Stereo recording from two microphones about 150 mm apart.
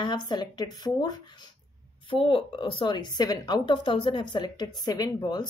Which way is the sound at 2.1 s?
35° left (ahead or behind).